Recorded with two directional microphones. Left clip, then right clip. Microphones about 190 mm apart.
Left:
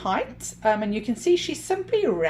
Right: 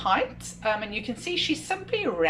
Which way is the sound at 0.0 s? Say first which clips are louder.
Right 2 dB; 45° left (ahead or behind).